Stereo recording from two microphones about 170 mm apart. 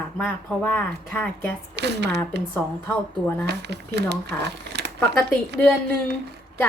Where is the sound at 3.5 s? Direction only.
80° right.